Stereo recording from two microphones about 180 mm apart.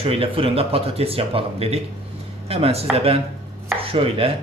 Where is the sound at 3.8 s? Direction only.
30° right (ahead or behind).